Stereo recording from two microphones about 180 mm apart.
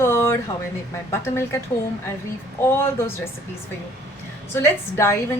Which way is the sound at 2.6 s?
15° left (ahead or behind).